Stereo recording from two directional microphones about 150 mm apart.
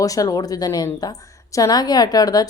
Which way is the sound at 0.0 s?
25° left (ahead or behind).